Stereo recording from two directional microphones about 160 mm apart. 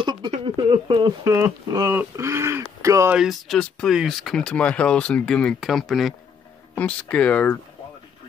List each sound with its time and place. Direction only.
0.0 s a sound: 30° right (ahead or behind)
0.6 s speech: 30° right (ahead or behind)
3.2 s speech: centre (ahead or behind)